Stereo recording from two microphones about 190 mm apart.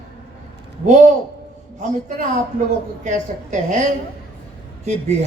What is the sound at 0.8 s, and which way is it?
Speech, 40° right (ahead or behind).